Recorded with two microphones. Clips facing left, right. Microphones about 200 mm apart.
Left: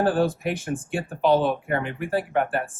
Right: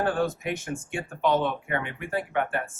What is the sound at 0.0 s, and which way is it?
Speech, 30° left (ahead or behind).